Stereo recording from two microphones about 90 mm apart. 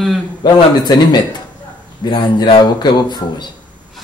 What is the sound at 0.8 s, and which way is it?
A man's voice, 50° left (ahead or behind).